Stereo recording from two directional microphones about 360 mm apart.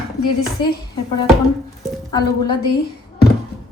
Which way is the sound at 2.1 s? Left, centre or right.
Centre.